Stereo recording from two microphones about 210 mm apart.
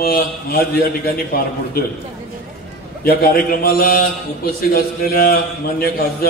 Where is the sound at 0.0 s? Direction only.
45° left (ahead or behind).